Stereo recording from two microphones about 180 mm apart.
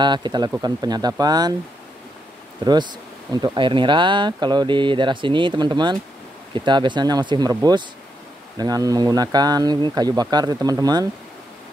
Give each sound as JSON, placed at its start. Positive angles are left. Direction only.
{"t": 0.0, "sound": "speech", "side_deg": -25}
{"t": 2.6, "sound": "speech", "side_deg": -25}